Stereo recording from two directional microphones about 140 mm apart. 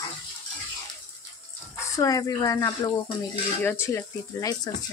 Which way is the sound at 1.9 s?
25° left (ahead or behind).